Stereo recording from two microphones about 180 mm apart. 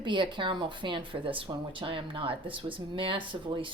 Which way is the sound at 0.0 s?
25° right (ahead or behind).